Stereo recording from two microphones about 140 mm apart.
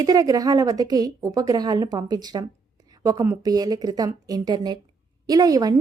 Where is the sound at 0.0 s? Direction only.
25° right (ahead or behind).